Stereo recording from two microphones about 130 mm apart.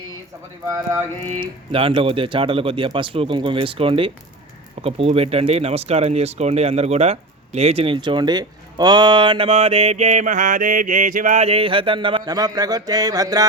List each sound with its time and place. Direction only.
0.7 s speech: 25° right (ahead or behind)
1.4 s speech: 40° right (ahead or behind)
7.9 s speech: 35° right (ahead or behind); by 11.4 s 85° right
11.4 s speech: 45° right (ahead or behind); by 13.5 s 25° right (ahead or behind)